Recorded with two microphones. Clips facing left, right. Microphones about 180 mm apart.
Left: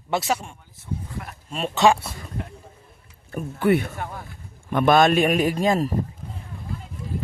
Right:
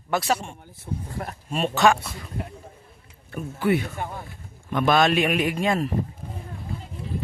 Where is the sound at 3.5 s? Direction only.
55° left (ahead or behind); by 5.9 s 35° left (ahead or behind).